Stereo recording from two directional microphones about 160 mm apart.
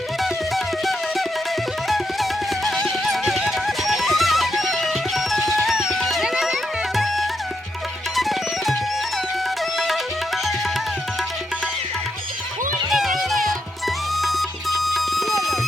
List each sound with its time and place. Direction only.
0.2 s music: centre (ahead or behind)
2.6 s music: centre (ahead or behind)
5.4 s music: 20° right (ahead or behind)
5.6 s music: centre (ahead or behind)
9.7 s tabla: centre (ahead or behind)
12.9 s music: centre (ahead or behind)